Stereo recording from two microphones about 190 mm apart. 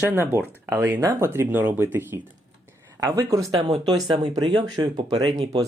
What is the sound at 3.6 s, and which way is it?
Speech, 30° right (ahead or behind).